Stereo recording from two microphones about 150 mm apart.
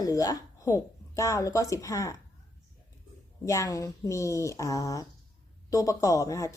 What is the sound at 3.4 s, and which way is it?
Speech, 20° left (ahead or behind).